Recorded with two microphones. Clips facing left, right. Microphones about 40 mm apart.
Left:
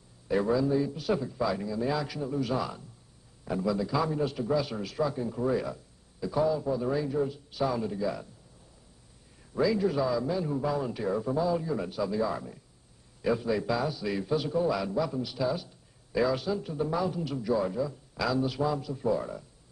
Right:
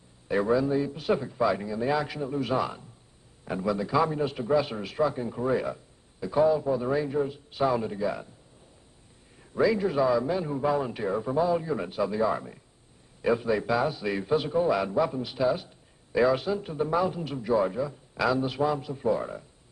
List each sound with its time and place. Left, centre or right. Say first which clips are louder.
0.3 s a man's voice: right 2 dB; right
9.4 s a sound: right 3 dB; right
9.7 s a man's voice: right 3 dB; right